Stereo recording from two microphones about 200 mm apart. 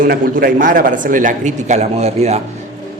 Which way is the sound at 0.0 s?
50° right (ahead or behind).